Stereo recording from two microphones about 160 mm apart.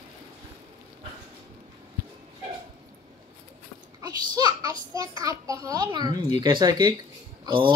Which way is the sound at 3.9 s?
25° right (ahead or behind).